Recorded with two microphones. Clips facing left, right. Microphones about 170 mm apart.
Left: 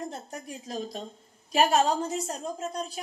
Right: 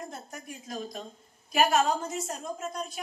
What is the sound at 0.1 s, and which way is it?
A woman's voice, 30° left (ahead or behind).